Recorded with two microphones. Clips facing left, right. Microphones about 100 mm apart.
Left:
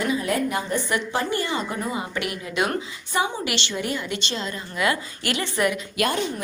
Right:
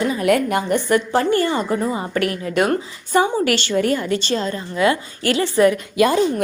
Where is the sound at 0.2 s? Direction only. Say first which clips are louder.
Right 7 dB; 75° right (ahead or behind).